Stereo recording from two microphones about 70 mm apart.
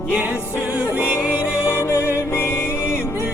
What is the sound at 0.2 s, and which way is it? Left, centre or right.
Music, centre.